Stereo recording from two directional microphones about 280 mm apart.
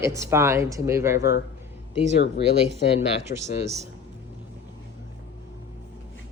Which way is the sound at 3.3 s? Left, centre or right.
Left.